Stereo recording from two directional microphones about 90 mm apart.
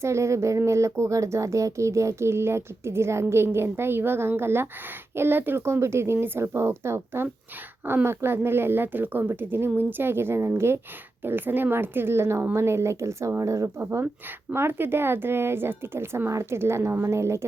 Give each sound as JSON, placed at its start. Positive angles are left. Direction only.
{"t": 0.0, "sound": "speech", "side_deg": -30}